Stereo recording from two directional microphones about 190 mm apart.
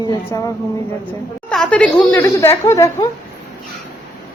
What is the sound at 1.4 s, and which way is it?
Speech, 5° left (ahead or behind).